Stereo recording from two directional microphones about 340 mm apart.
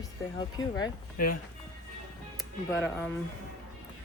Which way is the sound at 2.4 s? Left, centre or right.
Centre.